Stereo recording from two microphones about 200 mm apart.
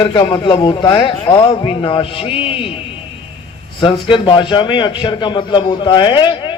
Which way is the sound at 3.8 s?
25° left (ahead or behind).